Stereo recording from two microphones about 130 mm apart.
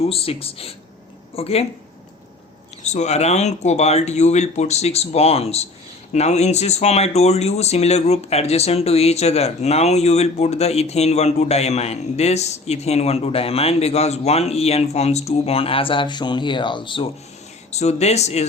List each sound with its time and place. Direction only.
0.1 s speech: 45° left (ahead or behind)
2.8 s speech: 60° left (ahead or behind); by 17.1 s 40° left (ahead or behind)
17.7 s speech: 60° left (ahead or behind)